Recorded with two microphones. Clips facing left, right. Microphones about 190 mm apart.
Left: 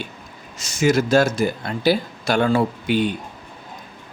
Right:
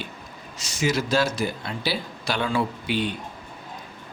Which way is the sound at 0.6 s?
45° left (ahead or behind).